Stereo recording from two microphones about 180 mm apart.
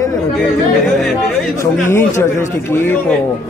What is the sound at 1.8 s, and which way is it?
Speech, 15° left (ahead or behind).